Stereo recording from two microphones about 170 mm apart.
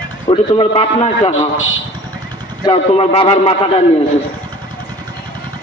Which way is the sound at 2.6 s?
30° left (ahead or behind).